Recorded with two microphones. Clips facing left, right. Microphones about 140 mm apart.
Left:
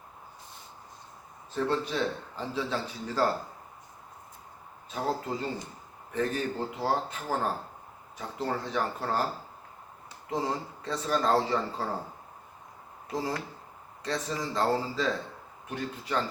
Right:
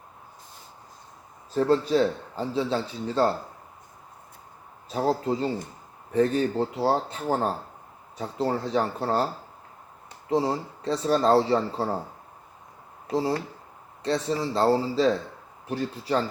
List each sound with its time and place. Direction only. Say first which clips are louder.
1.5 s a man's voice: right 8 dB; 35° right (ahead or behind)
4.9 s a man's voice: right 6 dB; 35° right (ahead or behind)
10.2 s a man's voice: right 6 dB; 30° right (ahead or behind)
13.1 s a man's voice: right 7 dB; 30° right (ahead or behind)